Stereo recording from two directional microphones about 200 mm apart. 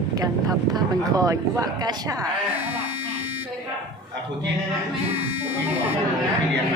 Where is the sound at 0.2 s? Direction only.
20° right (ahead or behind).